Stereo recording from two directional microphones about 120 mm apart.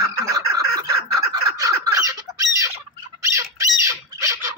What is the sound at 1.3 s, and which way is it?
Squawk, 30° right (ahead or behind).